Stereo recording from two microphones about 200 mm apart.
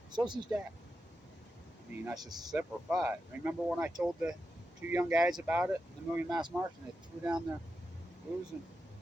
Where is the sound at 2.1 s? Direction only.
20° right (ahead or behind).